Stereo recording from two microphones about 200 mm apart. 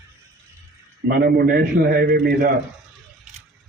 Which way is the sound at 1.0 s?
50° right (ahead or behind).